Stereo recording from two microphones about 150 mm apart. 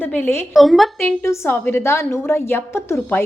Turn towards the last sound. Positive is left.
turn(degrees=15)  # may be behind; listen again after turning